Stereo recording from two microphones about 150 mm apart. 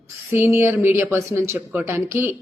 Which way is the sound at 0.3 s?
15° right (ahead or behind).